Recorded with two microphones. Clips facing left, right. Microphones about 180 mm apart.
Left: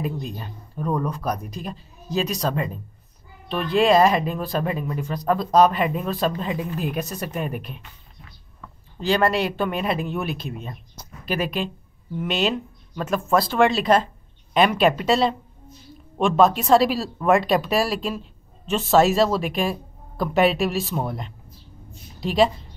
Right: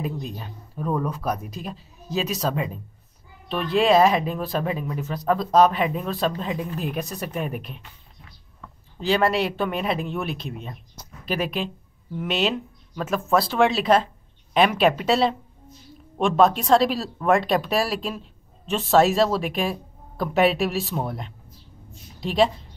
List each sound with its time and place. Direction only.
0.0 s speech: centre (ahead or behind)
9.0 s a woman's voice: centre (ahead or behind)